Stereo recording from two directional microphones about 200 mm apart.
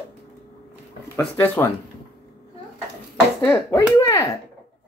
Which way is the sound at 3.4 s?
10° left (ahead or behind).